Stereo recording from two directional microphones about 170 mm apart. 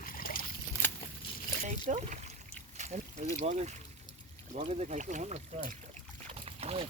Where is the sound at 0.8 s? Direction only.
10° left (ahead or behind).